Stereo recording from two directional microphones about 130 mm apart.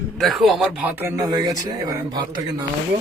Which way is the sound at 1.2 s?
30° right (ahead or behind).